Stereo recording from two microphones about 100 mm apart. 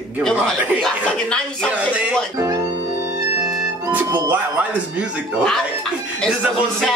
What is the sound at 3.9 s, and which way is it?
Speech, 15° right (ahead or behind).